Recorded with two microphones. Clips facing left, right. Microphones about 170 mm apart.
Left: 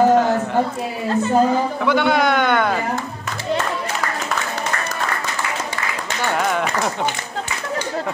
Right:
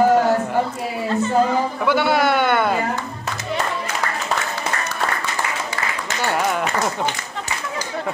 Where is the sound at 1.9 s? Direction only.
5° right (ahead or behind).